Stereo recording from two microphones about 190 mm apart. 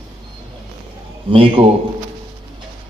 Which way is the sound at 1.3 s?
30° right (ahead or behind).